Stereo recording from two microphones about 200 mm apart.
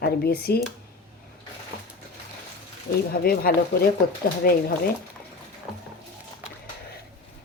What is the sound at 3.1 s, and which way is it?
Speech, 50° left (ahead or behind).